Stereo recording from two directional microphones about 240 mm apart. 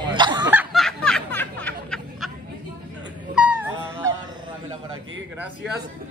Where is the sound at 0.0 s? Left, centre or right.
Centre.